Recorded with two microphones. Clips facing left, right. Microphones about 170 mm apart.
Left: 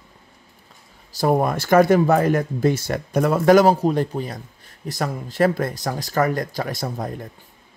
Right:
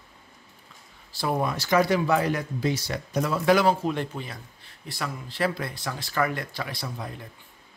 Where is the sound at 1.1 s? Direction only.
45° left (ahead or behind).